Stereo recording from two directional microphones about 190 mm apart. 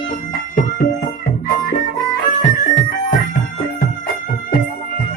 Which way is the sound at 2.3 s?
40° left (ahead or behind).